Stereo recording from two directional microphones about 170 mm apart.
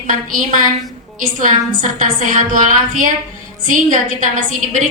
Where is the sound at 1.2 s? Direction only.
55° right (ahead or behind).